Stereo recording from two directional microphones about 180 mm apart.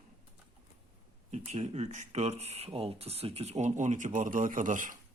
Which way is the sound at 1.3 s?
40° right (ahead or behind).